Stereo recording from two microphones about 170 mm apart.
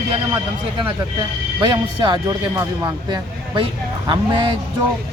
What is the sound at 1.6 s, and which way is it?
Speech, 30° right (ahead or behind).